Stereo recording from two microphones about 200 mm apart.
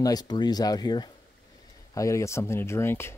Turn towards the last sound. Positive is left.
turn(degrees=10)  # may be behind; listen again after turning